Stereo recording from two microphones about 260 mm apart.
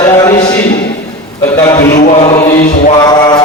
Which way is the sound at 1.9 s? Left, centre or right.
Left.